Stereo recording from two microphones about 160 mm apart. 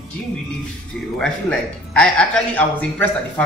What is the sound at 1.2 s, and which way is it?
A man's voice, 5° left (ahead or behind).